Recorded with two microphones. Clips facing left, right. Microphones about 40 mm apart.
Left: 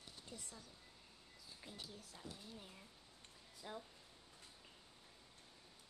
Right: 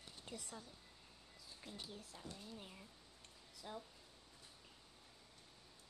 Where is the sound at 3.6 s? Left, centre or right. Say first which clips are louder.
Even; centre.